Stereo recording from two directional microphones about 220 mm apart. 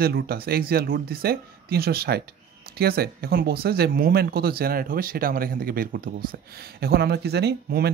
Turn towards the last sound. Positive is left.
turn(degrees=-45)  # may be behind; listen again after turning